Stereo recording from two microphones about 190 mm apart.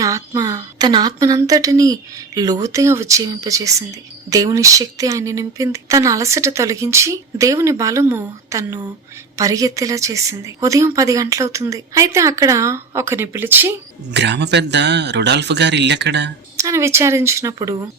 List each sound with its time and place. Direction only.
0.0 s speech: 20° right (ahead or behind)
14.1 s speech: 65° right (ahead or behind)
16.6 s speech: 15° right (ahead or behind)